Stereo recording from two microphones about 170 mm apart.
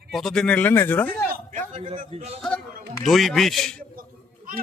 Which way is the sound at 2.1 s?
35° right (ahead or behind).